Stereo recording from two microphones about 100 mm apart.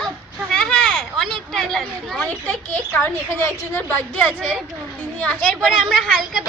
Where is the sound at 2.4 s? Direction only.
20° left (ahead or behind).